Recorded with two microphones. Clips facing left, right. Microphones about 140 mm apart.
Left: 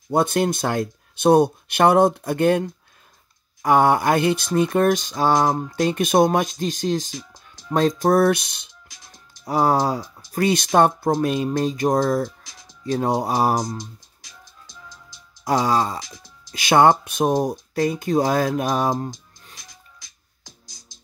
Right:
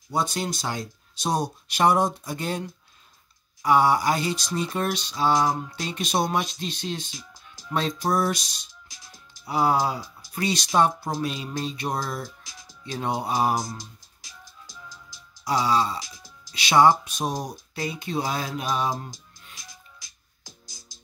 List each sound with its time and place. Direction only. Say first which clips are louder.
0.1 s speech: left 8 dB; 55° left (ahead or behind)
3.6 s mantra: left 3 dB; 50° left (ahead or behind)
7.7 s speech: left 7 dB; 45° left (ahead or behind)
9.4 s speech: left 4 dB; 40° left (ahead or behind)
10.3 s mantra: left 6 dB; 50° left (ahead or behind)
12.8 s speech: left 7 dB; 40° left (ahead or behind)
15.4 s mantra: left 3 dB; 45° left (ahead or behind)
20.0 s music: left 1 dB; 5° right (ahead or behind)